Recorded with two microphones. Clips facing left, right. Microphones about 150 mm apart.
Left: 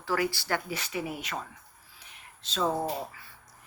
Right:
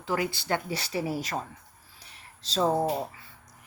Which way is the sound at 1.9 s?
35° right (ahead or behind).